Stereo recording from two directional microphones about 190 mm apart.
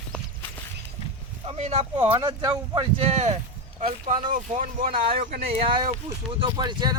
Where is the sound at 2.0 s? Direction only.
25° right (ahead or behind).